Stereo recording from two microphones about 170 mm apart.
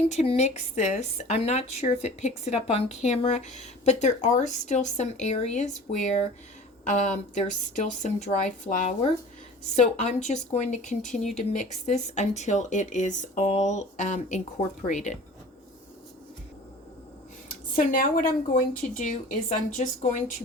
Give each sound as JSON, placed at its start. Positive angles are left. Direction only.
{"t": 0.1, "sound": "speech", "side_deg": 40}
{"t": 11.1, "sound": "speech", "side_deg": 0}
{"t": 11.5, "sound": "speech", "side_deg": 45}
{"t": 17.7, "sound": "speech", "side_deg": 55}